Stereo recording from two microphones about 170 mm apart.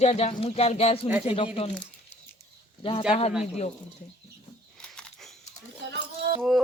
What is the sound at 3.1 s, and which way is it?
Speech, 35° left (ahead or behind).